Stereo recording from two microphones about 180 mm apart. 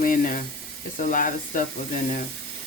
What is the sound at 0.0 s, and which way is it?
Sizzle, 50° left (ahead or behind).